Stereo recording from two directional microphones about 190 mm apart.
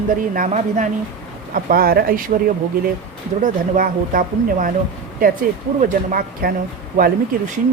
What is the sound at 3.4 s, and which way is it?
Speech, 45° right (ahead or behind).